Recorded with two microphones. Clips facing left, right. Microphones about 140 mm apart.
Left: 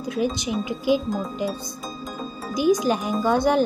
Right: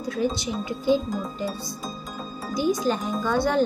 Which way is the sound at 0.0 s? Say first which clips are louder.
Left 1 dB; 20° left (ahead or behind).